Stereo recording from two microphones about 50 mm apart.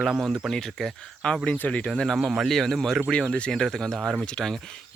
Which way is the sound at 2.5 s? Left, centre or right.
Centre.